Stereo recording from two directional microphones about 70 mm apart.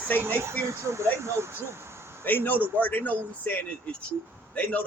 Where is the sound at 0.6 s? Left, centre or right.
Right.